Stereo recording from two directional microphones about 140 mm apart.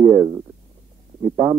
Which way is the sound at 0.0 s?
20° right (ahead or behind).